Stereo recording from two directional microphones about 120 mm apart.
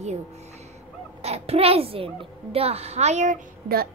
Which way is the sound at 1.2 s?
60° right (ahead or behind).